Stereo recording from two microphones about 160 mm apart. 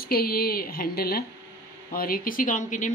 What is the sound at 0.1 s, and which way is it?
Speech, 70° left (ahead or behind).